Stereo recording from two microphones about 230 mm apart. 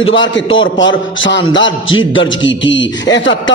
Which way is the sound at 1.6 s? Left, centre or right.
Left.